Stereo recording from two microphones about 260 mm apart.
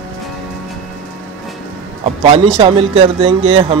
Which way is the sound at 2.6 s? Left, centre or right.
Right.